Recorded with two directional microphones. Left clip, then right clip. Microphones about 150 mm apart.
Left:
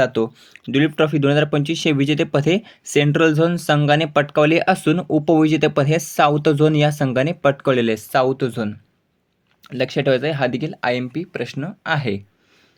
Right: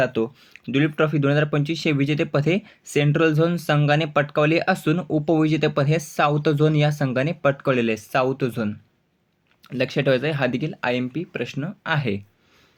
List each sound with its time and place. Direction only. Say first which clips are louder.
0.0 s speech: left 4 dB; 40° left (ahead or behind)